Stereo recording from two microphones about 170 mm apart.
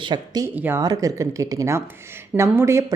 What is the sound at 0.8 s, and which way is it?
A woman's voice, 20° right (ahead or behind).